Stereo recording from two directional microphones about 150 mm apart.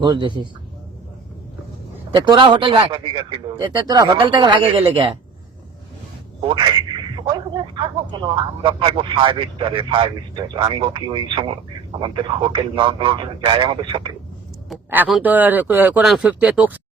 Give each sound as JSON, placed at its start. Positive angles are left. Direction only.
{"t": 0.0, "sound": "speech", "side_deg": -30}
{"t": 2.1, "sound": "speech", "side_deg": -30}
{"t": 6.4, "sound": "speech", "side_deg": -30}
{"t": 14.8, "sound": "speech", "side_deg": -10}